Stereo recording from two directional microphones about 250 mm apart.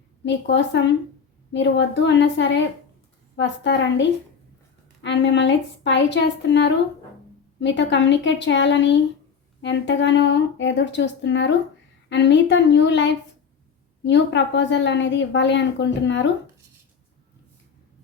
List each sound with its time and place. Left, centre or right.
0.3 s a woman's voice: left
5.0 s a woman's voice: left